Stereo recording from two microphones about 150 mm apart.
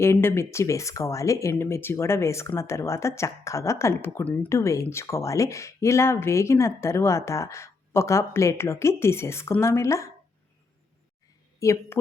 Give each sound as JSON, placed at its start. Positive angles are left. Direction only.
{"t": 0.0, "sound": "speech", "side_deg": 15}
{"t": 11.6, "sound": "speech", "side_deg": 20}